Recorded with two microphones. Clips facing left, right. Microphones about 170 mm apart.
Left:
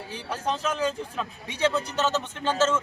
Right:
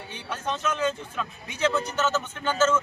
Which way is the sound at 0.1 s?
35° left (ahead or behind).